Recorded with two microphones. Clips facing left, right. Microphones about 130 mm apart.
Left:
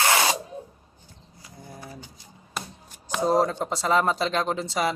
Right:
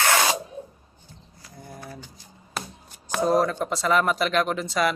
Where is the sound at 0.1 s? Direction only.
25° left (ahead or behind).